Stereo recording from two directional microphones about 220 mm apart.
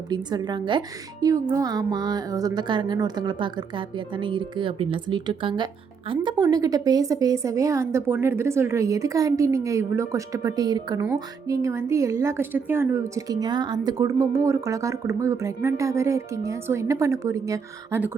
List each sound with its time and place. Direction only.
0.1 s a woman's voice: 20° right (ahead or behind)